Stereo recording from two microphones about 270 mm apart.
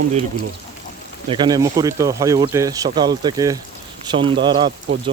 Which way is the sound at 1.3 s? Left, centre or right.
Centre.